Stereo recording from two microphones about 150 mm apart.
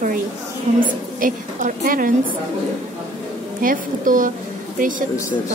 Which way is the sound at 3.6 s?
65° right (ahead or behind).